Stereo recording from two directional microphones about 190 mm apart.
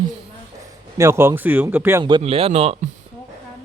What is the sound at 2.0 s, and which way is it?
Speech, 25° right (ahead or behind).